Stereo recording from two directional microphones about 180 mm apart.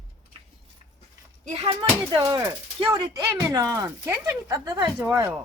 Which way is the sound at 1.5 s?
25° right (ahead or behind).